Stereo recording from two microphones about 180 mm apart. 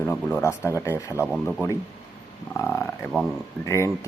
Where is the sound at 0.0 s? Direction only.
10° left (ahead or behind).